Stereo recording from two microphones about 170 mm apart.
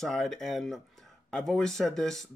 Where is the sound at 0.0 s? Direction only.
Centre (ahead or behind).